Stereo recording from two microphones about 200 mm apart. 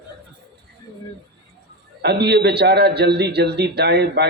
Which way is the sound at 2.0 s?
55° right (ahead or behind).